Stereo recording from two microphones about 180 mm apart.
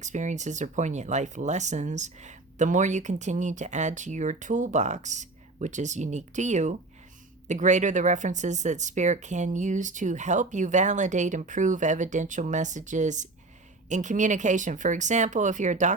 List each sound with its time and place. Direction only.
0.0 s speech: 40° right (ahead or behind)